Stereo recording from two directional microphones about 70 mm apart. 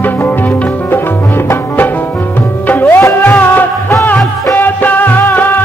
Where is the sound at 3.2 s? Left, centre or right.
Left.